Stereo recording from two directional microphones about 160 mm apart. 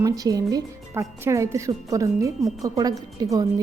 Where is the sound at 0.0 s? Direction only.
25° right (ahead or behind).